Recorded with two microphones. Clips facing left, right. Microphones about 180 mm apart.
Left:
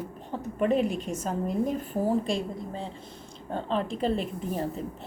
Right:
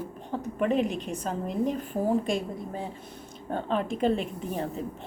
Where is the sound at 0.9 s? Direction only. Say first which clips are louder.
Left 1 dB; 40° left (ahead or behind).